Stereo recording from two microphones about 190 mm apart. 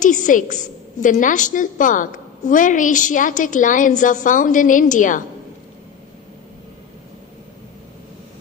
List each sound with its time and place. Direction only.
0.0 s a woman's voice: 40° left (ahead or behind)